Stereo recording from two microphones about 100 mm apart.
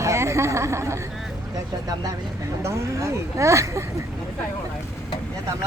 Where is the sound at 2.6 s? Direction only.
30° right (ahead or behind).